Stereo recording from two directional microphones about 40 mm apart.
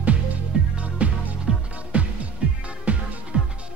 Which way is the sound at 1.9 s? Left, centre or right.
Right.